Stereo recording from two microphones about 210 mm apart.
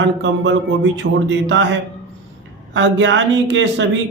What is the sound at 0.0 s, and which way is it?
Speech, 60° right (ahead or behind).